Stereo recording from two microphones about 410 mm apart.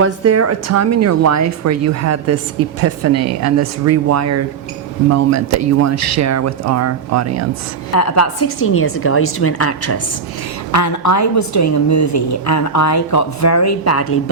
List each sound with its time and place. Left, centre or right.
0.0 s speech: right
7.9 s a woman's voice: left